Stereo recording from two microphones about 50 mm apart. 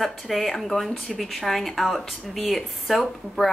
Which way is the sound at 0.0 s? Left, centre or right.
Centre.